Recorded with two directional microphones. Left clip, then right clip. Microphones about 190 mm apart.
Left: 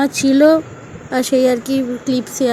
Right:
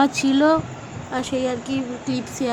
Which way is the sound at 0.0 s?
5° left (ahead or behind).